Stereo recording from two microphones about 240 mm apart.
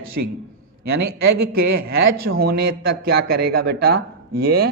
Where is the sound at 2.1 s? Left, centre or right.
Right.